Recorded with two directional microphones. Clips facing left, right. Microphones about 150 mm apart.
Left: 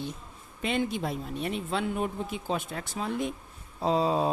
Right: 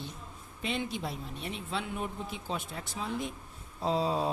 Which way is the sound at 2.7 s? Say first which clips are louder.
Left 4 dB; 70° left (ahead or behind).